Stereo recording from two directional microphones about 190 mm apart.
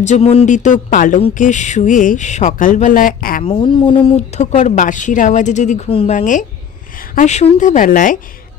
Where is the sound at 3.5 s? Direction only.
25° left (ahead or behind); by 8.2 s 45° left (ahead or behind).